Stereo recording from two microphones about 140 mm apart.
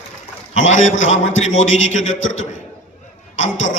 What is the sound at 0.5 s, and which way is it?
A man's voice, 60° left (ahead or behind).